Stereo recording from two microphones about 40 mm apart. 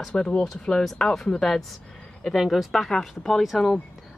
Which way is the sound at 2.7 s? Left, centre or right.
Centre.